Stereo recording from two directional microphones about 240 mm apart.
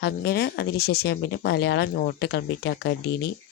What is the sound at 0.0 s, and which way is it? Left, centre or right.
Speech, left.